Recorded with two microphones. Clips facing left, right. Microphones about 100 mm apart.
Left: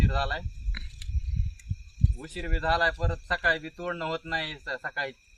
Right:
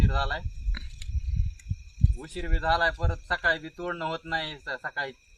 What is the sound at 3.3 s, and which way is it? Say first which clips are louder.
Speech: even; 15° right (ahead or behind).